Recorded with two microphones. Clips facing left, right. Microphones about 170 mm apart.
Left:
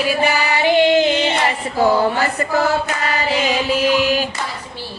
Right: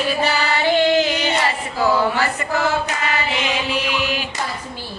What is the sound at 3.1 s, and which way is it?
Chant, 40° left (ahead or behind).